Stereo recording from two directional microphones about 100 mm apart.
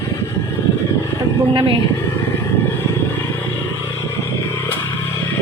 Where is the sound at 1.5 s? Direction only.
55° right (ahead or behind).